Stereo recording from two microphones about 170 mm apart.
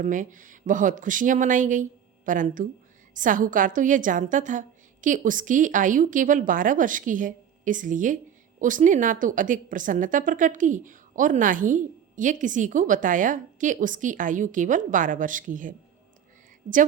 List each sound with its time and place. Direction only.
0.0 s a woman's voice: 50° right (ahead or behind)